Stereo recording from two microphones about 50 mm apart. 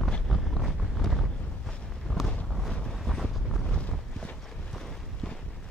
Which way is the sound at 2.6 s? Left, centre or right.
Centre.